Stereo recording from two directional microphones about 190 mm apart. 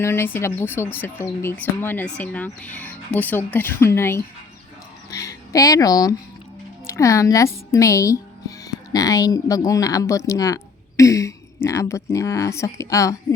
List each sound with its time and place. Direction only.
0.0 s speech: 15° left (ahead or behind)